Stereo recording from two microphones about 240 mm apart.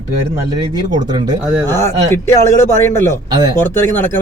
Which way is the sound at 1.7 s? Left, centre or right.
Centre.